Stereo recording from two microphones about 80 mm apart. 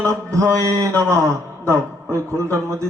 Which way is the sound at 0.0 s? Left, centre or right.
Right.